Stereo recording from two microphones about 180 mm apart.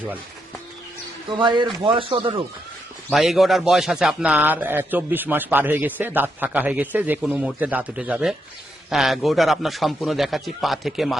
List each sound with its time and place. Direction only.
1.3 s speech: 25° right (ahead or behind)
3.1 s a man's voice: centre (ahead or behind)